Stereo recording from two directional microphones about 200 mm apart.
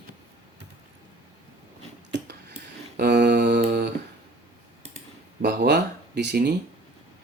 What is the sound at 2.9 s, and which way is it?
Mantra, 55° right (ahead or behind).